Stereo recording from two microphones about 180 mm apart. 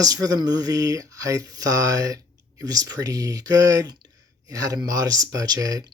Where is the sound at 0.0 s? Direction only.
20° right (ahead or behind).